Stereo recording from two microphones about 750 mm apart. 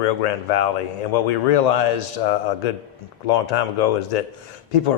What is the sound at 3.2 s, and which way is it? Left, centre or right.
Speech, left.